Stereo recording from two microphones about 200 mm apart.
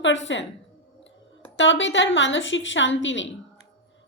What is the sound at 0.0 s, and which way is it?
Speech, 65° left (ahead or behind).